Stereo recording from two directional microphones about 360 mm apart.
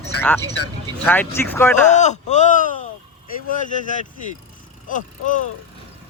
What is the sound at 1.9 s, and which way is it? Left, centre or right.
Speech, centre.